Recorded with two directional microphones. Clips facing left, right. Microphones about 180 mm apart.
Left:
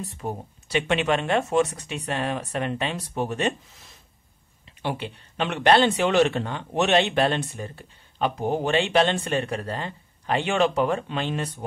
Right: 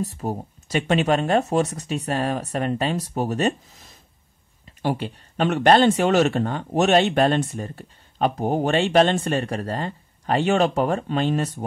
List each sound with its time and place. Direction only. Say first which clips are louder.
0.0 s speech: right 5 dB; 40° right (ahead or behind)
4.8 s speech: right 5 dB; 45° right (ahead or behind)